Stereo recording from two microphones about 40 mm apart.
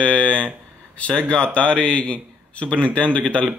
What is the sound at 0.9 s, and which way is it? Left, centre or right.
A man's voice, left.